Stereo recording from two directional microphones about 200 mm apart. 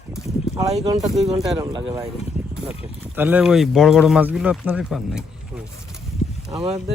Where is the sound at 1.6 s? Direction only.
15° right (ahead or behind).